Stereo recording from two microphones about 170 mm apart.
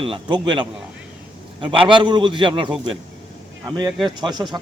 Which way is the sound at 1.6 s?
30° right (ahead or behind).